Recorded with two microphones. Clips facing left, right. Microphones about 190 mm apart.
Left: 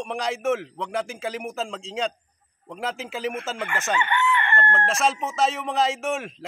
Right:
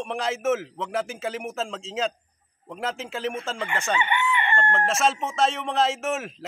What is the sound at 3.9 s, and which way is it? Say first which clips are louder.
Chicken: left 3 dB; 15° right (ahead or behind).